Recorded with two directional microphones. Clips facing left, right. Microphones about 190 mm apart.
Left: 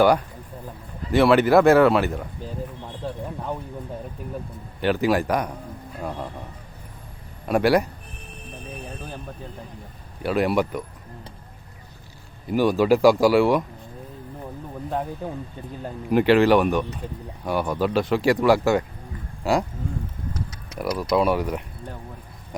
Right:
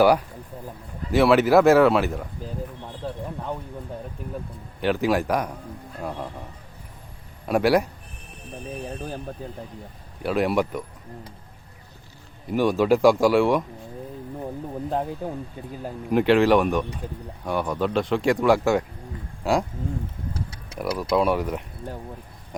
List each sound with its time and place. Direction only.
1.1 s speech: centre (ahead or behind)
4.8 s speech: centre (ahead or behind)
7.4 s a man's voice: centre (ahead or behind)
10.2 s speech: centre (ahead or behind)
12.5 s speech: centre (ahead or behind)
15.2 s speech: 10° right (ahead or behind)
20.3 s a sound: 30° right (ahead or behind)
21.0 s speech: centre (ahead or behind)